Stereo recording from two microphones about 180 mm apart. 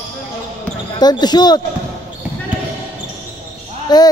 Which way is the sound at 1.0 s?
25° left (ahead or behind).